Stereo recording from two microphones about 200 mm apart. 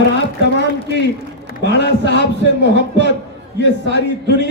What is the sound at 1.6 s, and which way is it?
A man's voice, 60° left (ahead or behind).